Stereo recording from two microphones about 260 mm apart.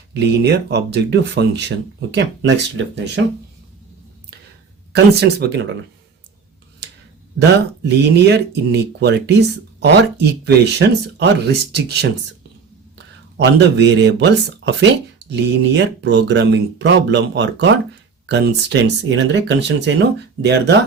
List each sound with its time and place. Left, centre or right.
0.1 s speech: right
4.9 s speech: right
7.9 s speech: right
13.3 s speech: right
16.0 s speech: right